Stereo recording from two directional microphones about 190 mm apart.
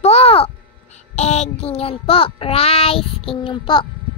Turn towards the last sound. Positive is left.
turn(degrees=25)  # may be behind; listen again after turning